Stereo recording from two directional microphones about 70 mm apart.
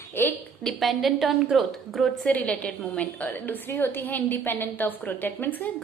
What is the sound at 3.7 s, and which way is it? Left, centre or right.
A woman's voice, left.